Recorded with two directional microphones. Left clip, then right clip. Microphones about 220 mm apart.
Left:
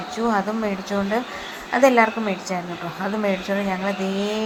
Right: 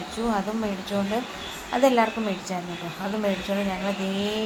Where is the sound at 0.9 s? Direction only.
15° left (ahead or behind).